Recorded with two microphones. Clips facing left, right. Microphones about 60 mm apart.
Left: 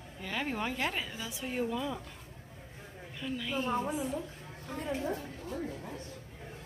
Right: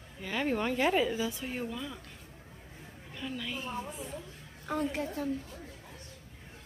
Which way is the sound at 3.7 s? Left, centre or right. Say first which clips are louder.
Left 6 dB; left.